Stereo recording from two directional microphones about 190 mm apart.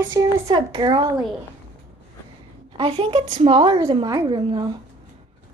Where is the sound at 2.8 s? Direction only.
30° right (ahead or behind).